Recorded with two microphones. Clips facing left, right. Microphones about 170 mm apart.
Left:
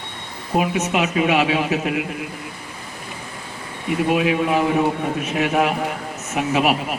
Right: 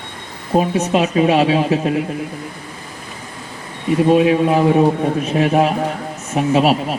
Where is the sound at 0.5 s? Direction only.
30° right (ahead or behind).